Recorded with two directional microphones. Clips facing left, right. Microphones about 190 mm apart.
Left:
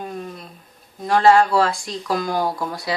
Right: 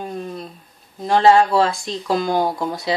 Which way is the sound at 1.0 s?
25° right (ahead or behind).